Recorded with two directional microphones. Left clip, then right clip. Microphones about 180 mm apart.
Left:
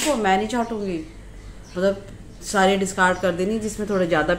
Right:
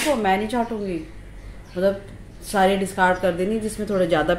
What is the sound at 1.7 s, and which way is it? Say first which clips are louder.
Speech: even; 15° right (ahead or behind).